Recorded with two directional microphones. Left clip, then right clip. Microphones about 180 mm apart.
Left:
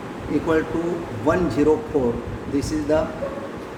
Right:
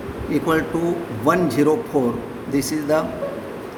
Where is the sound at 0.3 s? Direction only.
60° right (ahead or behind).